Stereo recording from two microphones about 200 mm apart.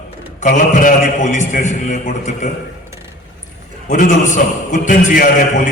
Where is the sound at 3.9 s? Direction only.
40° left (ahead or behind).